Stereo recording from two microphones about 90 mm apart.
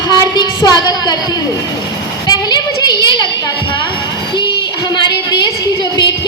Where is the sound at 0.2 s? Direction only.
50° left (ahead or behind).